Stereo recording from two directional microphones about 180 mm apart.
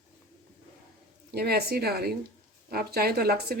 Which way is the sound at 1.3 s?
60° right (ahead or behind).